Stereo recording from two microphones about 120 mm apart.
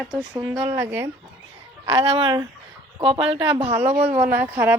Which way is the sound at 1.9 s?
45° right (ahead or behind).